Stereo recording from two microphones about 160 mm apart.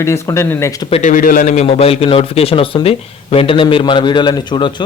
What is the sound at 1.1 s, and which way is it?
Speech, 60° left (ahead or behind).